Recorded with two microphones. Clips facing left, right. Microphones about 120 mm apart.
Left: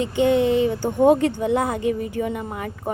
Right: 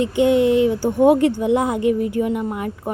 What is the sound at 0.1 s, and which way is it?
A woman's voice, 15° right (ahead or behind).